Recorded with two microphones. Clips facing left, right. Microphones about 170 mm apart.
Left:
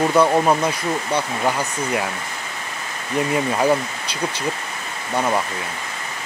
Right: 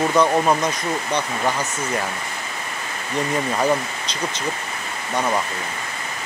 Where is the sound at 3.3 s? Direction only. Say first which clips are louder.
Left 2 dB; 10° left (ahead or behind).